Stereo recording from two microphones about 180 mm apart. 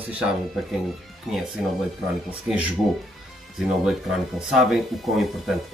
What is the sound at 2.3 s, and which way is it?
Speech, 5° right (ahead or behind).